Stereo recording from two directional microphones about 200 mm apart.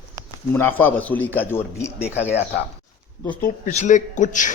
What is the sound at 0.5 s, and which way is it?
A man's voice, 10° left (ahead or behind).